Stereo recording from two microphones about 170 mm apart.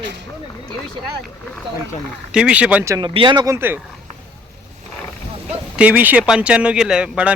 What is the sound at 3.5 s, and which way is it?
Speech, 10° right (ahead or behind).